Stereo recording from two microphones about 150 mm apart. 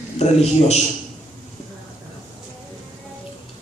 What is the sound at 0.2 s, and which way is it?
Speech, 45° left (ahead or behind).